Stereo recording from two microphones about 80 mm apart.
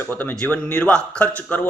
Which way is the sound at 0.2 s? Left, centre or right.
Left.